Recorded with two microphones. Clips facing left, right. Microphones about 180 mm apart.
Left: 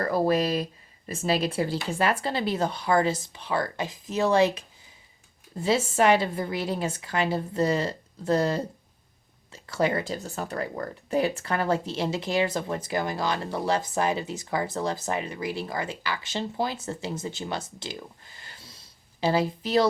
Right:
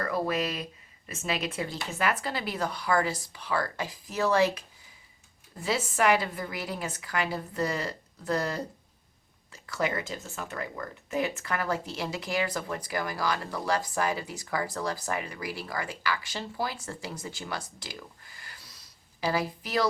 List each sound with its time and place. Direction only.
0.0 s speech: 35° left (ahead or behind)